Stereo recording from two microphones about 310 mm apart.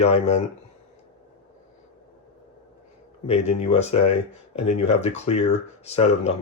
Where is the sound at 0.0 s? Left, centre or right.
Left.